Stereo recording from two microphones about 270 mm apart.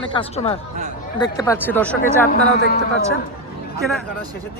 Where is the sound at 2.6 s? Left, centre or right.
Left.